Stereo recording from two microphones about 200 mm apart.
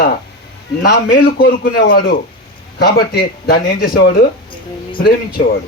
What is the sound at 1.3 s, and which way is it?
Speech, 50° left (ahead or behind).